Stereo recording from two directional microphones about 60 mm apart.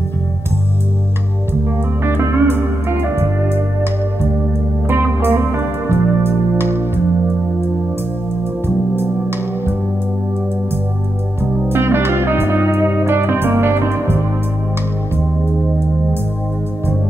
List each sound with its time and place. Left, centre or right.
2.0 s music: right
4.8 s music: right
11.7 s music: right